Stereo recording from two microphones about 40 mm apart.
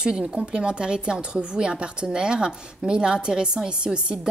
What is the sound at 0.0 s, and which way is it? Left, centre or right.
A woman's voice, right.